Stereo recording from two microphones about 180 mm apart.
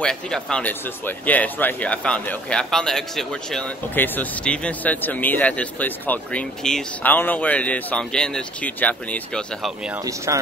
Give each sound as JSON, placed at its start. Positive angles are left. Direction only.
{"t": 0.0, "sound": "speech", "side_deg": 5}
{"t": 10.0, "sound": "speech", "side_deg": -20}